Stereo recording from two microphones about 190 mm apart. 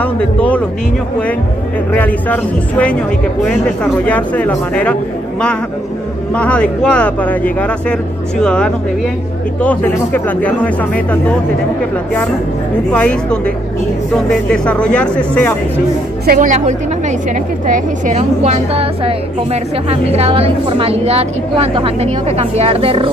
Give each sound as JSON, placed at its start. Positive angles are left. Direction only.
{"t": 0.0, "sound": "speech", "side_deg": 5}
{"t": 2.0, "sound": "speech", "side_deg": 10}
{"t": 6.3, "sound": "speech", "side_deg": 5}
{"t": 12.9, "sound": "speech", "side_deg": 5}
{"t": 16.3, "sound": "a woman's voice", "side_deg": -40}